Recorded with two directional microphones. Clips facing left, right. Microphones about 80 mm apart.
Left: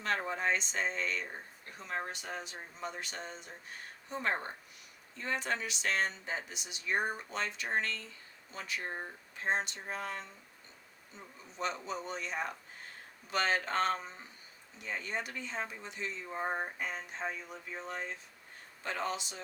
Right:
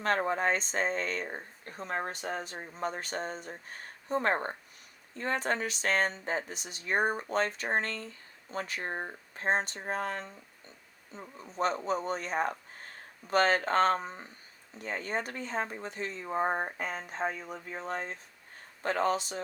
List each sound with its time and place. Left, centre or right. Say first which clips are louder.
0.0 s speech: right 5 dB; right